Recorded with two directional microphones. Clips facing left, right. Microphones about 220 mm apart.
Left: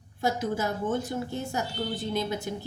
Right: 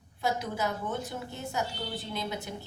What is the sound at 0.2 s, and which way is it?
Speech, 45° left (ahead or behind).